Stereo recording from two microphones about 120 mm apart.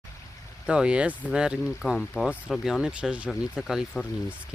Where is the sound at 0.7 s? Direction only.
10° right (ahead or behind).